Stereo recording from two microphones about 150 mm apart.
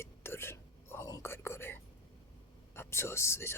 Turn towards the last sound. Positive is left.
turn(degrees=15)  # may be behind; listen again after turning